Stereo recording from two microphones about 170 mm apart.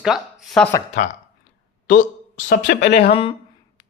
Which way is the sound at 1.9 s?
50° left (ahead or behind).